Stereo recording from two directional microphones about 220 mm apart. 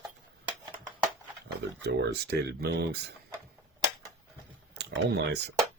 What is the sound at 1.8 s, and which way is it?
Speech, 50° right (ahead or behind).